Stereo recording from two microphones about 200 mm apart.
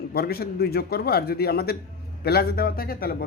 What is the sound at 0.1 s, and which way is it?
A man's voice, 50° left (ahead or behind).